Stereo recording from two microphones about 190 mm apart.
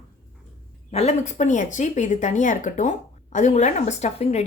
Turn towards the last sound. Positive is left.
turn(degrees=35)  # may be behind; listen again after turning